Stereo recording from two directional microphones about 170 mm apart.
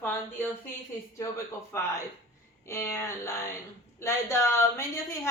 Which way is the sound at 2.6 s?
15° left (ahead or behind).